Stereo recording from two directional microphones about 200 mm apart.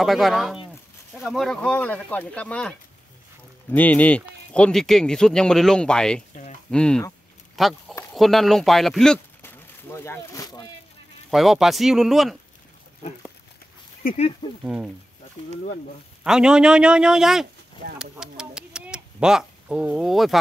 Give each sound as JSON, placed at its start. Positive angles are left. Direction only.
{"t": 0.0, "sound": "speech", "side_deg": 0}
{"t": 3.7, "sound": "speech", "side_deg": 10}
{"t": 11.2, "sound": "speech", "side_deg": 0}
{"t": 14.0, "sound": "speech", "side_deg": 35}
{"t": 14.6, "sound": "speech", "side_deg": -5}
{"t": 16.3, "sound": "speech", "side_deg": -5}